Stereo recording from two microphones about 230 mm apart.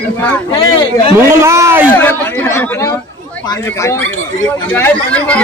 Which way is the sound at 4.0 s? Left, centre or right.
Right.